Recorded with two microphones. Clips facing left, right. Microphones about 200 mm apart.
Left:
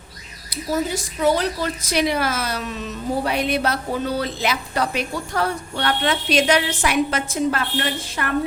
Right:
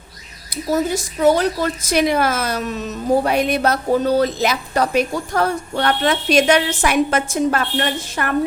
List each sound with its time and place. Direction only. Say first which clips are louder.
0.5 s a woman's voice: right 4 dB; 45° right (ahead or behind)